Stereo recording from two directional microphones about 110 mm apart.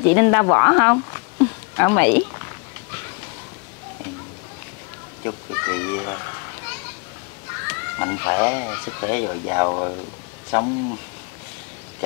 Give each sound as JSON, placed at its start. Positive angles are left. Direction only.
{"t": 0.0, "sound": "speech", "side_deg": 25}
{"t": 5.2, "sound": "speech", "side_deg": 25}
{"t": 7.6, "sound": "speech", "side_deg": 25}
{"t": 10.5, "sound": "speech", "side_deg": 20}